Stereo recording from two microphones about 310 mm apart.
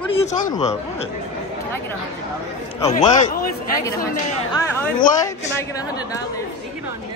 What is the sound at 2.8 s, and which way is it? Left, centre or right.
Speech, centre.